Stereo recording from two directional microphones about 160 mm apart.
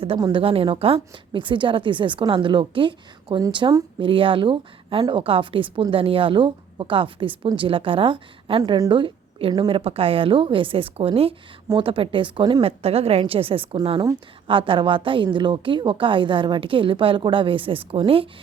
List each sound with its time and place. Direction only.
0.0 s a woman's voice: 30° right (ahead or behind)